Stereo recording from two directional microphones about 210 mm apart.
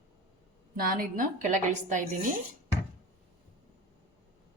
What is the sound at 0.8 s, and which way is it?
Speech, 40° right (ahead or behind).